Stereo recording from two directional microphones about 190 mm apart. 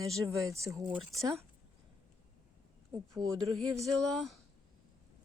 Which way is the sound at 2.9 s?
20° right (ahead or behind).